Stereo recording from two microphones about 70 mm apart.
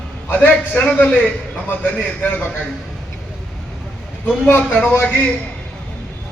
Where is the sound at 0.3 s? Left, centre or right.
Left.